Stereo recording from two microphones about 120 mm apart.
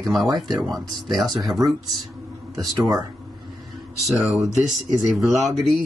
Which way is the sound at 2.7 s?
35° right (ahead or behind).